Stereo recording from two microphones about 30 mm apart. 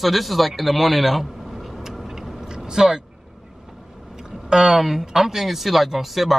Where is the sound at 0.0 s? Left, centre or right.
Centre.